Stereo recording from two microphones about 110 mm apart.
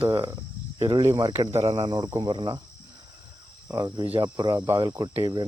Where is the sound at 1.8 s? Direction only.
40° right (ahead or behind).